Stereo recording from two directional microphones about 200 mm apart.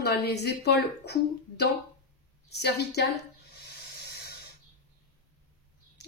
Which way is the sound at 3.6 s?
55° left (ahead or behind).